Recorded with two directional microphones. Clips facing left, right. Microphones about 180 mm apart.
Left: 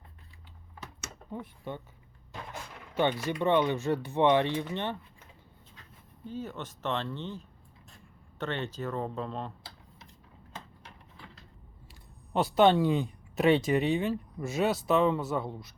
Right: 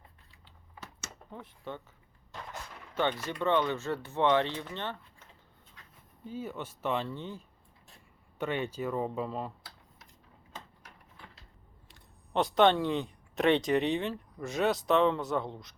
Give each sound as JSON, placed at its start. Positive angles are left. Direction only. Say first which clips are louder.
{"t": 1.3, "sound": "speech", "louder": "left 3 dB", "side_deg": 15}
{"t": 6.2, "sound": "speech", "louder": "even", "side_deg": -10}
{"t": 11.9, "sound": "speech", "louder": "left 4 dB", "side_deg": 5}